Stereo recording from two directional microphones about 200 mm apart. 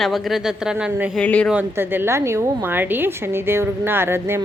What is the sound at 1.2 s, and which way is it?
Speech, 5° left (ahead or behind).